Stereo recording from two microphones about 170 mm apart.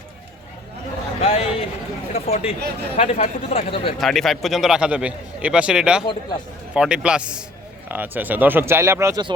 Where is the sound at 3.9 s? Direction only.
Centre (ahead or behind); by 9.2 s 15° right (ahead or behind).